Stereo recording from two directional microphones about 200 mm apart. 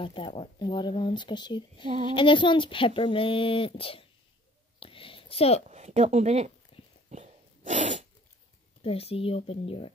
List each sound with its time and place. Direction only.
0.0 s speech: 25° left (ahead or behind)
4.7 s a sound: 25° left (ahead or behind)
5.7 s speech: 35° right (ahead or behind)
6.7 s horse: 30° left (ahead or behind)
7.1 s dog: 35° right (ahead or behind)
8.8 s speech: 30° left (ahead or behind)